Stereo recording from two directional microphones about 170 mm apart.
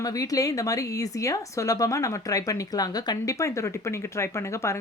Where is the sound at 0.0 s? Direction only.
20° left (ahead or behind).